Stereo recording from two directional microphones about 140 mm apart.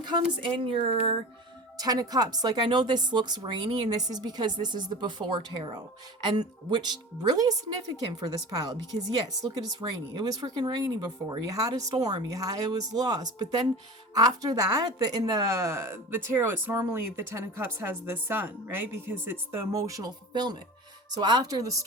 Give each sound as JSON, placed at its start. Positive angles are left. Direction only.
{"t": 0.5, "sound": "a woman's voice", "side_deg": -40}
{"t": 1.8, "sound": "a woman's voice", "side_deg": -25}
{"t": 9.8, "sound": "a woman's voice", "side_deg": -30}